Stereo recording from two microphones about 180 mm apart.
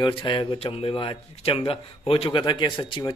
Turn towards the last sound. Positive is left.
turn(degrees=25)  # may be behind; listen again after turning